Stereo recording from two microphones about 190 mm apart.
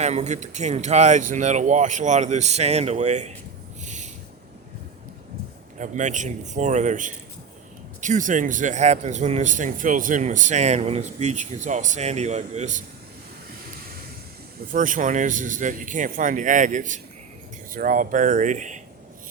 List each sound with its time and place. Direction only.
0.0 s speech: 35° right (ahead or behind)
3.8 s a sound: 40° right (ahead or behind)
5.7 s speech: 40° right (ahead or behind)
14.7 s speech: 45° right (ahead or behind)